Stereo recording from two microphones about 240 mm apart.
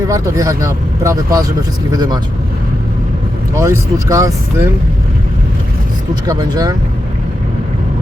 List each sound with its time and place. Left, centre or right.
0.1 s speech: centre
3.5 s speech: centre
6.2 s speech: centre